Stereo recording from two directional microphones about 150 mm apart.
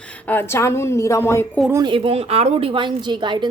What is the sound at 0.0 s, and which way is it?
A woman's voice, 10° left (ahead or behind).